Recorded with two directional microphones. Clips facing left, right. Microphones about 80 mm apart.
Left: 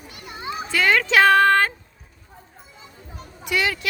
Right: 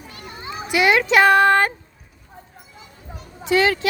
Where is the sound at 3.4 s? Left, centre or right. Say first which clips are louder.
Right 6 dB; right.